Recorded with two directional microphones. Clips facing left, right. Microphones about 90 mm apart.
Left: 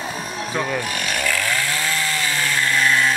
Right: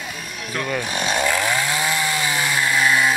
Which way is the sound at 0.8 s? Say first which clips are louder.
Right 2 dB; 20° right (ahead or behind).